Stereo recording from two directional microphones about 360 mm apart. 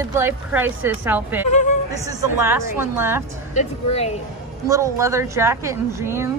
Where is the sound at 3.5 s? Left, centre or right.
Centre.